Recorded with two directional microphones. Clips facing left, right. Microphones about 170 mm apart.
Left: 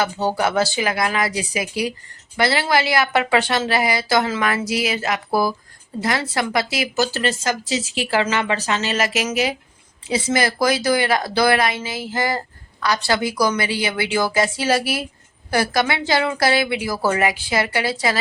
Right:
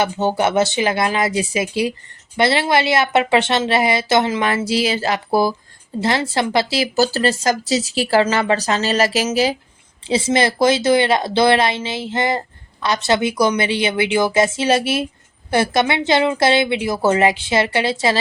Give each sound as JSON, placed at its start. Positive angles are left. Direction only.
{"t": 0.0, "sound": "speech", "side_deg": -20}